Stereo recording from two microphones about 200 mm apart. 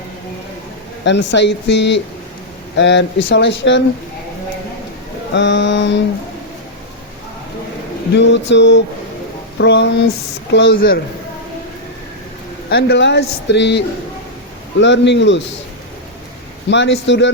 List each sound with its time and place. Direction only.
1.0 s speech: 60° left (ahead or behind)
5.3 s speech: 65° left (ahead or behind)
8.1 s speech: 65° left (ahead or behind)
12.7 s speech: 60° left (ahead or behind)
16.6 s speech: 60° left (ahead or behind)